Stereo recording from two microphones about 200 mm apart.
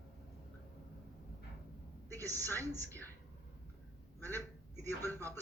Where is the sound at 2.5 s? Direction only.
15° right (ahead or behind).